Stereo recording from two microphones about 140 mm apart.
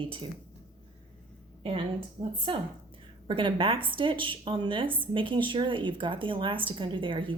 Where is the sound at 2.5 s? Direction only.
35° right (ahead or behind).